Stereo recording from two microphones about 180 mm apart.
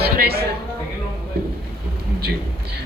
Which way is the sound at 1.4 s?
60° right (ahead or behind).